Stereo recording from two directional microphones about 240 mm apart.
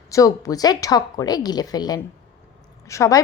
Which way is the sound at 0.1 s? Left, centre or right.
Centre.